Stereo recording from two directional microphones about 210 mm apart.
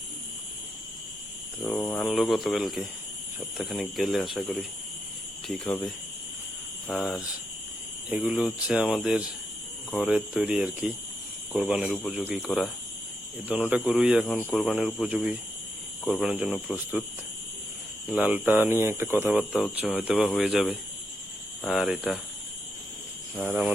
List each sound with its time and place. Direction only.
1.6 s speech: 10° left (ahead or behind)
6.8 s speech: centre (ahead or behind)
18.1 s speech: 5° right (ahead or behind)
23.4 s speech: 5° right (ahead or behind)